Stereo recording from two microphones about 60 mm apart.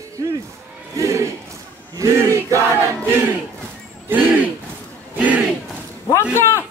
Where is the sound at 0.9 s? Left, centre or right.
Right.